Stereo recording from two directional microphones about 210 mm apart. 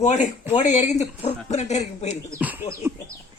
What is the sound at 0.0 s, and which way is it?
Speech, 35° left (ahead or behind).